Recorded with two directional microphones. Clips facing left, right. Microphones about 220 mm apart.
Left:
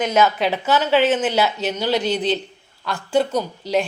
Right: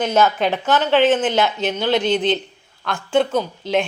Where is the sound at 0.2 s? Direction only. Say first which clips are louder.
Even; 5° left (ahead or behind).